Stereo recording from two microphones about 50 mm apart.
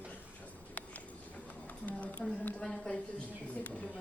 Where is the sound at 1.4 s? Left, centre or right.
Left.